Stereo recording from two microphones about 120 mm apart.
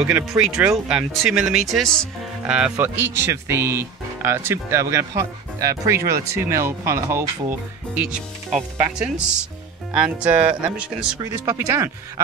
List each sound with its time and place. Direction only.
0.0 s speech: 5° right (ahead or behind)
2.4 s speech: 5° right (ahead or behind)
2.8 s speech: 20° right (ahead or behind)
7.9 s speech: 10° right (ahead or behind)
11.4 s speech: 25° right (ahead or behind)